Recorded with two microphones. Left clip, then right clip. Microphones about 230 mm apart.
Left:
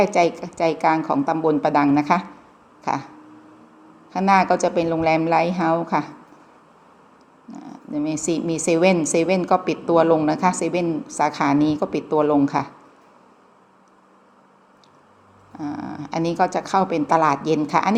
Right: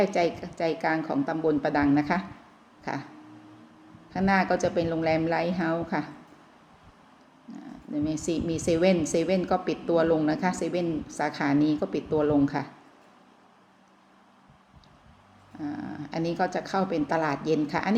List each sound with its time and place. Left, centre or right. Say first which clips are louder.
0.0 s a woman's voice: left 7 dB; centre
4.1 s a woman's voice: left 8 dB; centre
7.5 s a woman's voice: left 5 dB; centre
15.5 s a sound: left 6 dB; left
16.0 s a woman's voice: left 8 dB; centre